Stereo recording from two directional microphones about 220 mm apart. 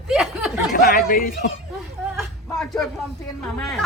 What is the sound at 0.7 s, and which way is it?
Speech, 35° left (ahead or behind).